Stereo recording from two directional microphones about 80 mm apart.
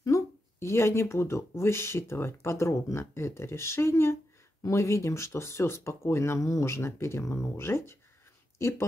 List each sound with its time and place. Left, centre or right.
0.0 s speech: left